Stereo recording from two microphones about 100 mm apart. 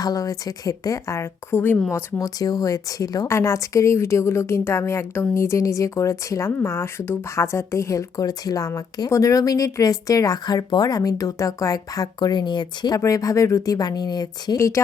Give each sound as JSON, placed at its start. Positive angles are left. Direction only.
{"t": 0.0, "sound": "a woman's voice", "side_deg": 40}
{"t": 2.1, "sound": "a woman's voice", "side_deg": 40}
{"t": 13.0, "sound": "a woman's voice", "side_deg": 35}